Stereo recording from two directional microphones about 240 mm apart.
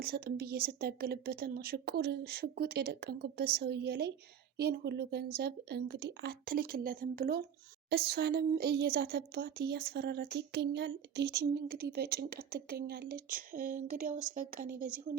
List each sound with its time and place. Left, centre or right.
0.0 s speech: right